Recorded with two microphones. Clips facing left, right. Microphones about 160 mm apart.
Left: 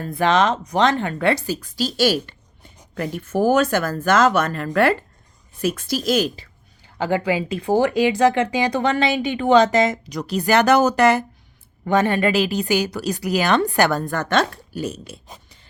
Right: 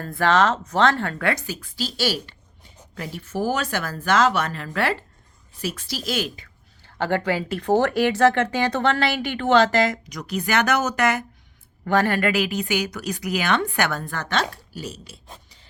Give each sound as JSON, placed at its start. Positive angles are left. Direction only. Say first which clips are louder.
{"t": 0.0, "sound": "speech", "louder": "left 1 dB", "side_deg": 20}
{"t": 6.8, "sound": "speech", "louder": "left 2 dB", "side_deg": 10}
{"t": 11.9, "sound": "a woman's voice", "louder": "left 2 dB", "side_deg": 20}